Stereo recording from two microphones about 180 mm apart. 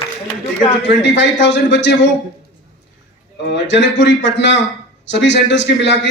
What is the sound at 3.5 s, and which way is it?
A man's voice, 75° left (ahead or behind).